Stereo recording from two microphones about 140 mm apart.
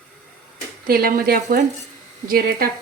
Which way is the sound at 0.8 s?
90° right.